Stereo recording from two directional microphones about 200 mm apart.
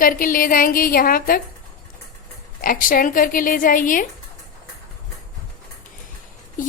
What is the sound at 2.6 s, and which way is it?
A woman's voice, 45° left (ahead or behind).